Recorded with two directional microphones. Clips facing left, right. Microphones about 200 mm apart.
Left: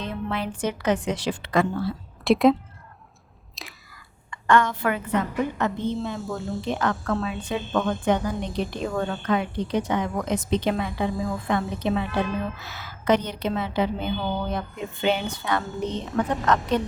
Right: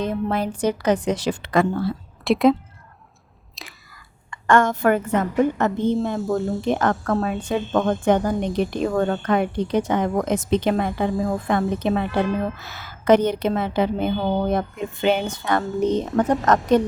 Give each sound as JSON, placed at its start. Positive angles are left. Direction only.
{"t": 0.0, "sound": "a woman's voice", "side_deg": -45}
{"t": 2.2, "sound": "a woman's voice", "side_deg": 0}
{"t": 3.5, "sound": "whispering", "side_deg": 0}
{"t": 4.3, "sound": "a woman's voice", "side_deg": -45}